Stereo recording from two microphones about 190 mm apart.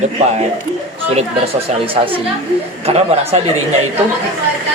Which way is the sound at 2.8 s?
35° right (ahead or behind).